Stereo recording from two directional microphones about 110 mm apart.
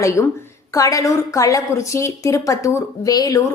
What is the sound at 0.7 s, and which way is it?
A woman's voice, 30° left (ahead or behind).